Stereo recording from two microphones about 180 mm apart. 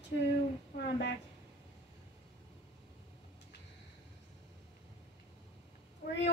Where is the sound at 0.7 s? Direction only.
70° left (ahead or behind).